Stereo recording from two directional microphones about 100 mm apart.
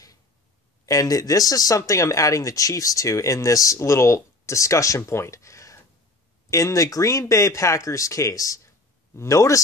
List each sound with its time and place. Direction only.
0.8 s speech: 35° left (ahead or behind)